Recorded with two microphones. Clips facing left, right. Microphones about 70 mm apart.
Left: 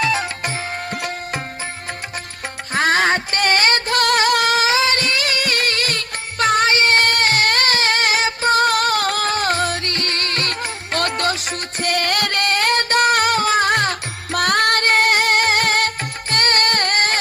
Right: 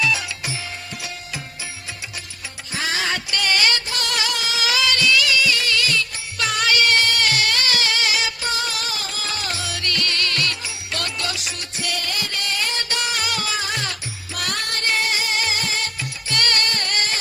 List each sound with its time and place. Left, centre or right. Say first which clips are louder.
0.0 s music: left 3 dB; left
2.7 s music: left 8 dB; left
4.7 s music: left 1 dB; left
10.9 s music: left 8 dB; left
16.3 s music: left 5 dB; left